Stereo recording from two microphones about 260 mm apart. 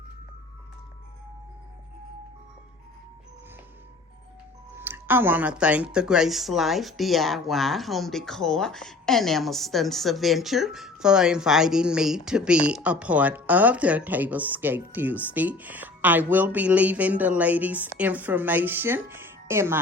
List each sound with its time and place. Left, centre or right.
4.8 s speech: centre